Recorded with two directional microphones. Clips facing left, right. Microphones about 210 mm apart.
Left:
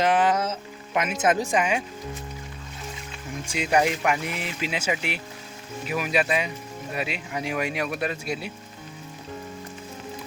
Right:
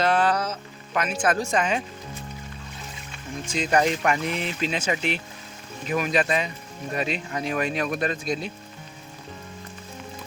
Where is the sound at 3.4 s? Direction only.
10° left (ahead or behind).